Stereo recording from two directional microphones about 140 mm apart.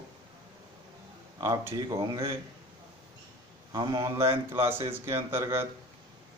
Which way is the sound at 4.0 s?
20° right (ahead or behind).